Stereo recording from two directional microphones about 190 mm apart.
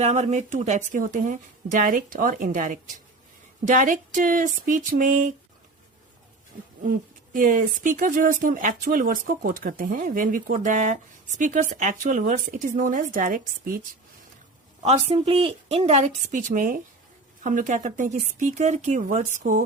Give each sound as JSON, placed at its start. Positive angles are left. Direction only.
{"t": 0.0, "sound": "speech", "side_deg": -35}
{"t": 7.3, "sound": "speech", "side_deg": -45}
{"t": 14.8, "sound": "speech", "side_deg": -35}